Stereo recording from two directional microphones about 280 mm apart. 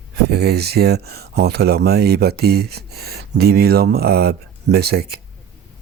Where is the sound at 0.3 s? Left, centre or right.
Right.